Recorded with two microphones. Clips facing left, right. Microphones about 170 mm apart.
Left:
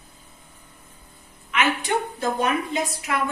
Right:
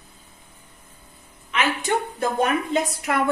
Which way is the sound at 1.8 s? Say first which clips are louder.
Right 1 dB; 45° right (ahead or behind).